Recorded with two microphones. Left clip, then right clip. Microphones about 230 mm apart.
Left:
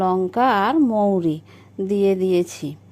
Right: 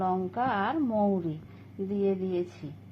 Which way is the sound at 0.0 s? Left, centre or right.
Left.